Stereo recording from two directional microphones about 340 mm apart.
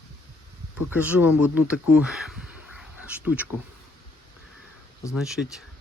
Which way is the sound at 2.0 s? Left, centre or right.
Centre.